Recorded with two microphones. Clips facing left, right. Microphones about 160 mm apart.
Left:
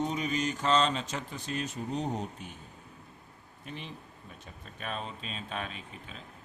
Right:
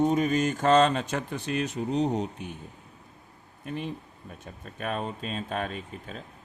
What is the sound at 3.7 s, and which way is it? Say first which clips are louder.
Speech: right 9 dB; 50° right (ahead or behind).